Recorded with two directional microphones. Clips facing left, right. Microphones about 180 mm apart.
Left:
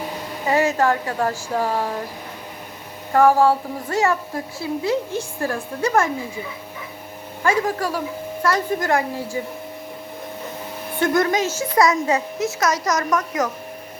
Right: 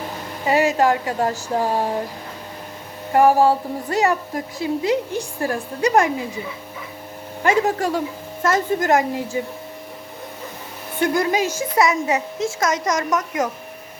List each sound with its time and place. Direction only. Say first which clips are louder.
0.4 s speech: right 1 dB; 15° right (ahead or behind)
3.1 s speech: even; 15° right (ahead or behind)
7.4 s a woman's voice: right 2 dB; 25° right (ahead or behind)
11.3 s a woman's voice: right 1 dB; 15° right (ahead or behind)